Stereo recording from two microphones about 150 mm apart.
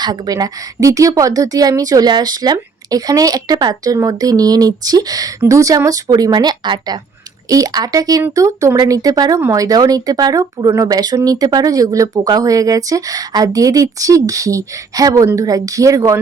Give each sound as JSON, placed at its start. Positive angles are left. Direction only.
{"t": 0.0, "sound": "speech", "side_deg": -25}